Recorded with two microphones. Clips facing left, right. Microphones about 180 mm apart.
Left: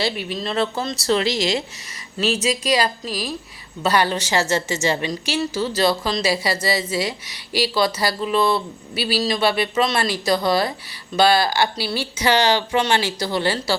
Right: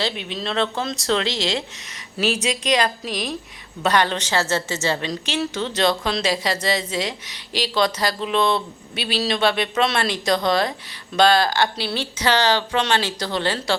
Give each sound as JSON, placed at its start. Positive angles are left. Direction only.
{"t": 0.0, "sound": "a woman's voice", "side_deg": 5}